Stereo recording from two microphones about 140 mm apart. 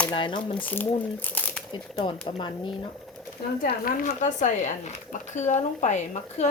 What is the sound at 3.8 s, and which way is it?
Speech, 70° left (ahead or behind).